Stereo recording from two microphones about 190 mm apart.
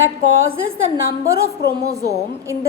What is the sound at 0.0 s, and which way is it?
Speech, 90° right.